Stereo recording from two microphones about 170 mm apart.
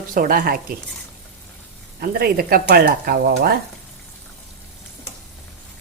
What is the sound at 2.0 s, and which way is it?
Speech, 60° right (ahead or behind).